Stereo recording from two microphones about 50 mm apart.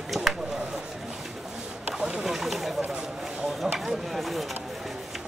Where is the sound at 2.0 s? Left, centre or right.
Centre.